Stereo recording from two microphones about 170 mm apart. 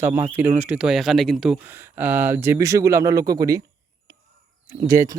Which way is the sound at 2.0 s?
10° right (ahead or behind).